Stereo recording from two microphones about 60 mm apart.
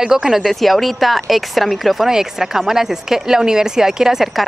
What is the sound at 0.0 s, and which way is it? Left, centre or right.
Speech, centre.